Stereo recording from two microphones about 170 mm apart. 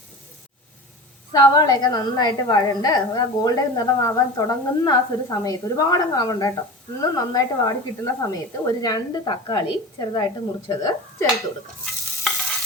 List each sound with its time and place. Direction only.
1.3 s a woman's voice: 20° left (ahead or behind)
12.3 s stir: centre (ahead or behind)